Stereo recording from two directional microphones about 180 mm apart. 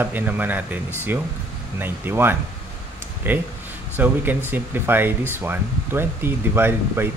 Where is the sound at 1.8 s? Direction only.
10° right (ahead or behind).